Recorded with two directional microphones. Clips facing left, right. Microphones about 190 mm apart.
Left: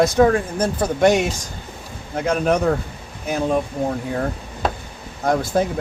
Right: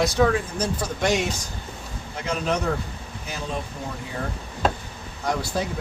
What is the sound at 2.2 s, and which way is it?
Speech, 55° left (ahead or behind).